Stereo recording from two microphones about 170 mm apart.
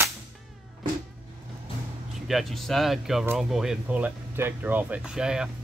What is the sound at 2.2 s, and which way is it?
Speech, centre (ahead or behind).